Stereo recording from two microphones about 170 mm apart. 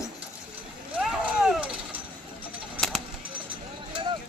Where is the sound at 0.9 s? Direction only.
5° right (ahead or behind).